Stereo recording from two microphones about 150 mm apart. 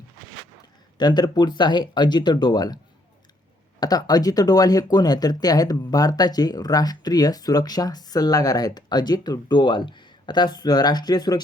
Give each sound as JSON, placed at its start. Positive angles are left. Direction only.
{"t": 0.9, "sound": "speech", "side_deg": 30}
{"t": 3.8, "sound": "speech", "side_deg": 25}